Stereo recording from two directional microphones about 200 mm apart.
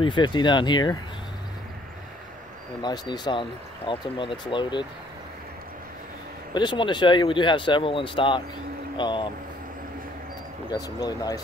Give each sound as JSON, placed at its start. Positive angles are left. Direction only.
{"t": 0.0, "sound": "speech", "side_deg": 25}
{"t": 2.8, "sound": "speech", "side_deg": 20}
{"t": 6.5, "sound": "speech", "side_deg": 25}
{"t": 10.7, "sound": "speech", "side_deg": 20}